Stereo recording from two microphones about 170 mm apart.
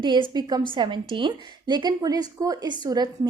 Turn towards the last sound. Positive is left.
turn(degrees=-25)  # may be behind; listen again after turning